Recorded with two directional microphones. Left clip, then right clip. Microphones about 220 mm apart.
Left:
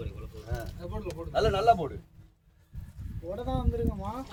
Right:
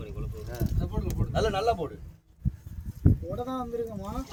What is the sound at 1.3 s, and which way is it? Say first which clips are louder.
Speech: left 3 dB; 20° left (ahead or behind).